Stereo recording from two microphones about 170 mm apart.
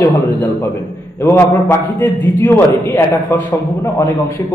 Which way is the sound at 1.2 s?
15° left (ahead or behind).